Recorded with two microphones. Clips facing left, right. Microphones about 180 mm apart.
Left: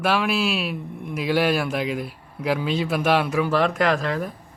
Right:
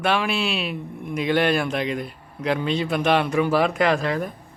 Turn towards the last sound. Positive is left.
turn(degrees=0)  # may be behind; listen again after turning